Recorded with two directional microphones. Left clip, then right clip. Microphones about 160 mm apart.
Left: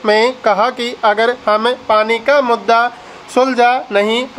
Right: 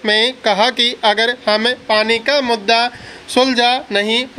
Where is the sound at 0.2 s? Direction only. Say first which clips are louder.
Left 2 dB; 35° right (ahead or behind).